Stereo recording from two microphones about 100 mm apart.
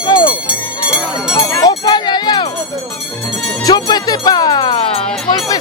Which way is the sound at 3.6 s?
45° left (ahead or behind).